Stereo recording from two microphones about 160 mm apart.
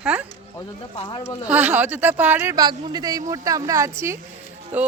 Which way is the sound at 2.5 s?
25° right (ahead or behind).